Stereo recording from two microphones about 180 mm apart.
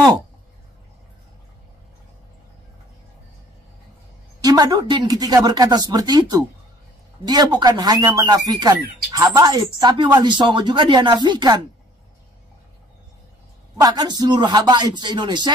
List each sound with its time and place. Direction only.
4.4 s speech: 20° right (ahead or behind)
13.7 s speech: 20° right (ahead or behind)